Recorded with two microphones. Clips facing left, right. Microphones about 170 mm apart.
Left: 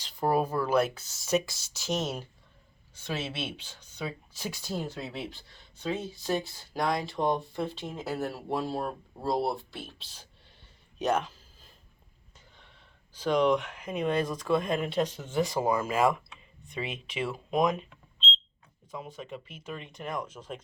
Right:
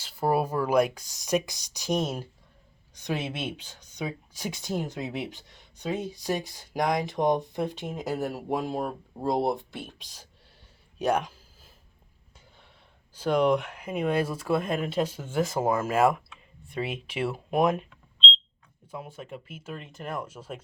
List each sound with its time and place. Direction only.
0.0 s speech: 10° right (ahead or behind)
10.9 s a sound: 10° right (ahead or behind)
13.1 s speech: 10° right (ahead or behind)
18.9 s speech: 10° right (ahead or behind)